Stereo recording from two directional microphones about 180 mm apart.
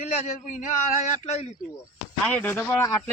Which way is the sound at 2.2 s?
10° left (ahead or behind).